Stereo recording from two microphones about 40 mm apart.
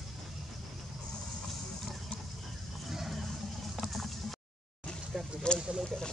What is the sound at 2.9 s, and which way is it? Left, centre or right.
Vehicle, centre.